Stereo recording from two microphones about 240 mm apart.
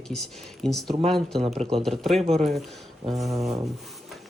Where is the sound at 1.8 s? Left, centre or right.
Centre.